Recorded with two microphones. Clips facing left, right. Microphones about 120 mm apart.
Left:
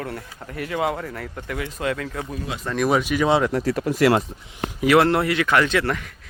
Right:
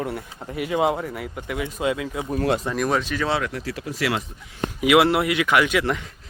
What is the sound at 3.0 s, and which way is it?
Speech, 10° left (ahead or behind).